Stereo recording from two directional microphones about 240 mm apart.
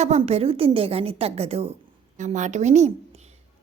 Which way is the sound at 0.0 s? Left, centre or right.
Right.